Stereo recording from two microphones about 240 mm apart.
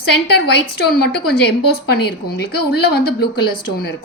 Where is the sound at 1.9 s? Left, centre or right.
Left.